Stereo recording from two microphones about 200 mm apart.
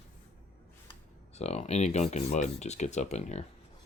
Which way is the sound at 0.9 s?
35° left (ahead or behind).